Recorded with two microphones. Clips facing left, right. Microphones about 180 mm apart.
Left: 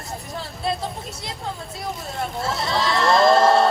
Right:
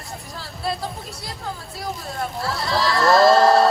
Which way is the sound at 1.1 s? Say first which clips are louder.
Left 1 dB; 20° left (ahead or behind).